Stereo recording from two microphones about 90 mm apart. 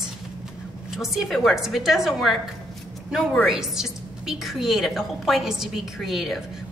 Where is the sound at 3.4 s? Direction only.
5° right (ahead or behind).